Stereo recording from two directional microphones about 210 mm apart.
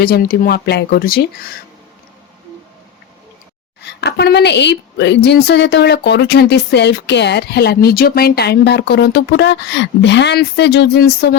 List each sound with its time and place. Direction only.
0.0 s a woman's voice: 45° left (ahead or behind)
3.8 s a woman's voice: 50° left (ahead or behind)